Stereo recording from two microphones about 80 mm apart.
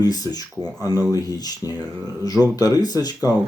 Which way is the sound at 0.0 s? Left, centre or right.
Left.